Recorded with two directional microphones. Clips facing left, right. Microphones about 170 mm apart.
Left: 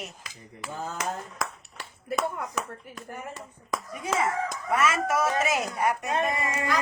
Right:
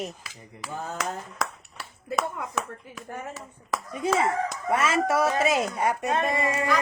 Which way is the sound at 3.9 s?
30° right (ahead or behind).